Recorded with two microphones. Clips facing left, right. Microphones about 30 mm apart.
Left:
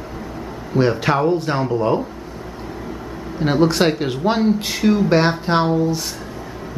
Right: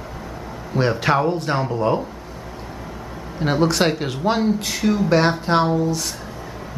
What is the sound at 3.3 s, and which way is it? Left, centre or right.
Speech, centre.